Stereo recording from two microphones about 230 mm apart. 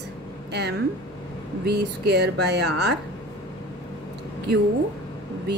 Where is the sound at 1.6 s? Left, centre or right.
Right.